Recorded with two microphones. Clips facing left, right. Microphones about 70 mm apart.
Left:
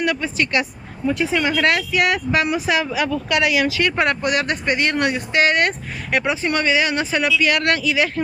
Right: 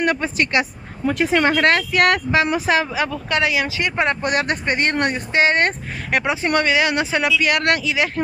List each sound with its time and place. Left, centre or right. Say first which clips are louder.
0.0 s speech: right 1 dB; right
1.3 s speech: right 4 dB; right
2.3 s speech: right 2 dB; right
4.2 s speech: even; right